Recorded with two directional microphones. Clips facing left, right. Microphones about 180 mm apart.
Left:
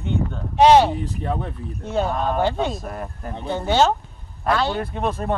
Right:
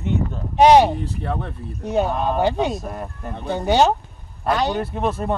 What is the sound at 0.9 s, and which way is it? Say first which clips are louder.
Speech: even; 15° left (ahead or behind).